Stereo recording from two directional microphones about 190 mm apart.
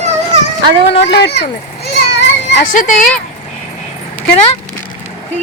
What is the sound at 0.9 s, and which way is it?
Children playing, 65° left (ahead or behind).